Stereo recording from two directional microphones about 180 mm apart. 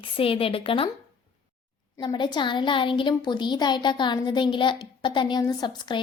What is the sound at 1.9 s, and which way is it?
A woman's voice, 25° left (ahead or behind).